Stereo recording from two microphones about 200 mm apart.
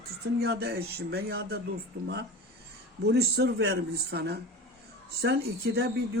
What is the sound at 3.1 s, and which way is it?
Speech, 55° right (ahead or behind).